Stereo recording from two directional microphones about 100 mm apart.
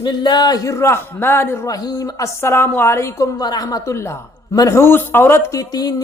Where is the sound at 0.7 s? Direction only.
25° left (ahead or behind).